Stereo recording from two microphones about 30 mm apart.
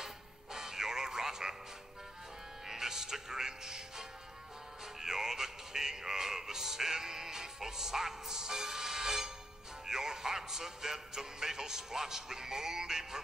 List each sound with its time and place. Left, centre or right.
0.0 s music: centre
2.7 s music: centre
5.0 s music: centre
9.8 s speech: centre